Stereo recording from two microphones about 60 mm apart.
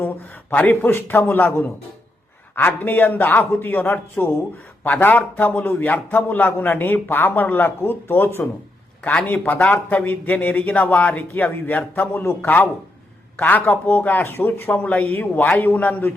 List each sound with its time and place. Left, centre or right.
0.5 s speech: left
0.9 s a man's voice: left
2.6 s a man's voice: left
14.7 s speech: left